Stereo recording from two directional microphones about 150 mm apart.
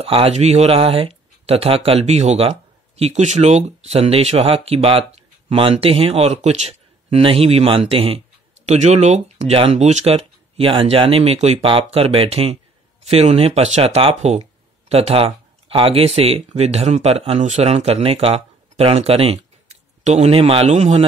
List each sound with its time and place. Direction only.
0.0 s speech: 40° right (ahead or behind)
8.6 s speech: 50° right (ahead or behind)